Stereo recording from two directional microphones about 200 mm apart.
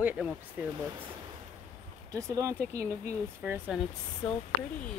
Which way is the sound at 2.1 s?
15° right (ahead or behind).